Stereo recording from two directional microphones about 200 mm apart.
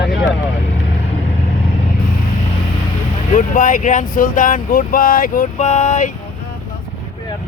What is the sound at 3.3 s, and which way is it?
Speech, 40° left (ahead or behind).